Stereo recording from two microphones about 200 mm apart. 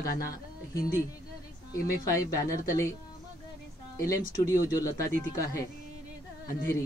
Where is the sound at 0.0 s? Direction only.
50° left (ahead or behind).